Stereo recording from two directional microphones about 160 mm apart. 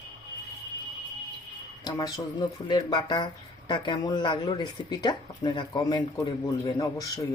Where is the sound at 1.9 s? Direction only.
20° left (ahead or behind).